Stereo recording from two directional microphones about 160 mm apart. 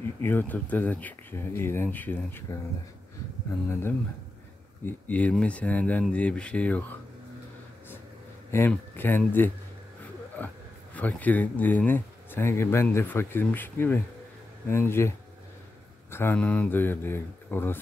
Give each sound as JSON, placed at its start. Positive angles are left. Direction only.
{"t": 0.2, "sound": "speech", "side_deg": 10}
{"t": 4.8, "sound": "speech", "side_deg": 10}
{"t": 8.5, "sound": "speech", "side_deg": 15}